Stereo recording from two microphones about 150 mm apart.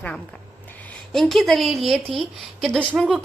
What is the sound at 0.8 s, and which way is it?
A woman's voice, 5° left (ahead or behind).